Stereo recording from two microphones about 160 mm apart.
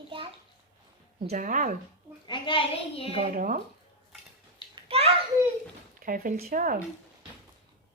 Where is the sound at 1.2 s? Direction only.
55° right (ahead or behind).